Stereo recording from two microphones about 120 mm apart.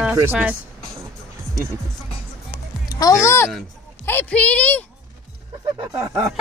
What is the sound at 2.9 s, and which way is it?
A woman's voice, 30° left (ahead or behind).